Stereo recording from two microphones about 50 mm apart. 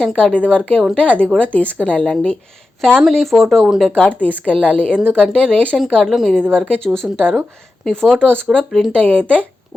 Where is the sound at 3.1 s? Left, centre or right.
Centre.